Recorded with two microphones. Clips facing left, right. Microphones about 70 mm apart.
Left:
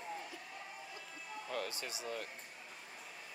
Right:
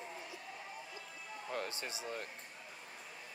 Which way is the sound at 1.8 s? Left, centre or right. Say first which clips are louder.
Even; right.